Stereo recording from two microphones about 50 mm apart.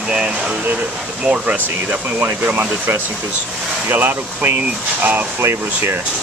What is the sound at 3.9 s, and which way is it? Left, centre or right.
Speech, right.